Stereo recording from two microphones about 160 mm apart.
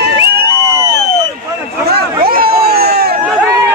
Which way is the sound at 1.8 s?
70° right (ahead or behind).